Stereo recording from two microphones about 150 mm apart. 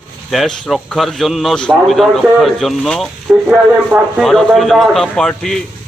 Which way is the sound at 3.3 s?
10° right (ahead or behind).